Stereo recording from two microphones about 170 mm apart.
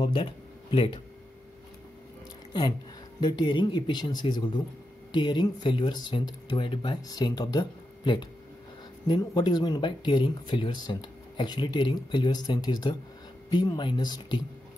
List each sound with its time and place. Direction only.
0.0 s speech: 30° left (ahead or behind)
3.2 s speech: 25° left (ahead or behind)